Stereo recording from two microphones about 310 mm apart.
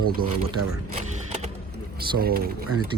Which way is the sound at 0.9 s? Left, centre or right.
Right.